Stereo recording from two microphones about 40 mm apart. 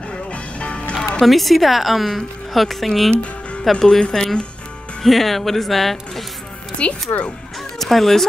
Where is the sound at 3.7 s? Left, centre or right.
Centre.